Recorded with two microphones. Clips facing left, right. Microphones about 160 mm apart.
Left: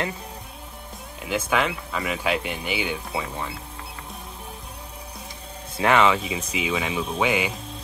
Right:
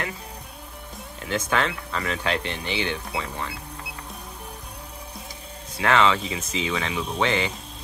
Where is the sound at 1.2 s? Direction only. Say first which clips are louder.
Left 1 dB; 10° left (ahead or behind).